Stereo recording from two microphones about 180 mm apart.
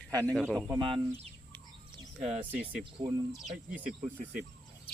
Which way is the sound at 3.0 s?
40° right (ahead or behind).